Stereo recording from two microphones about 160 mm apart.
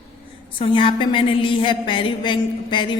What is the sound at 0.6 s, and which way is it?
A woman's voice, 35° left (ahead or behind).